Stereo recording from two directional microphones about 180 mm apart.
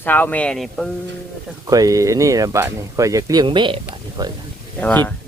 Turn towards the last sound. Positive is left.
turn(degrees=10)  # may be behind; listen again after turning